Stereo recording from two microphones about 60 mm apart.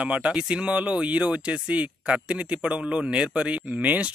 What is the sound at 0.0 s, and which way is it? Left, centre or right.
Speech, right.